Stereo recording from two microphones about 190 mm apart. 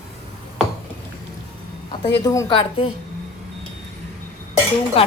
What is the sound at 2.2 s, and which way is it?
Speech, 20° left (ahead or behind).